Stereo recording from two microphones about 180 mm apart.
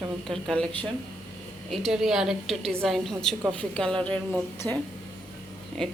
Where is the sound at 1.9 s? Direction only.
5° right (ahead or behind).